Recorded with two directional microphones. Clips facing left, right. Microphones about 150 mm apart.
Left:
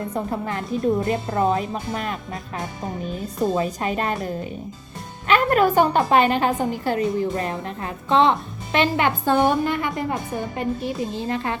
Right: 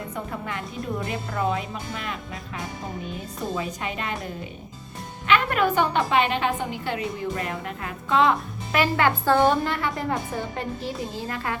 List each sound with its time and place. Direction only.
0.1 s a woman's voice: 35° left (ahead or behind)
3.5 s a woman's voice: 40° left (ahead or behind)
5.3 s a woman's voice: 40° left (ahead or behind); by 11.5 s 20° left (ahead or behind)